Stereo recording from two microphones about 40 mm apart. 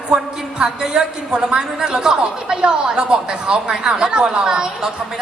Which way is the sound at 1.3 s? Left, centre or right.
Right.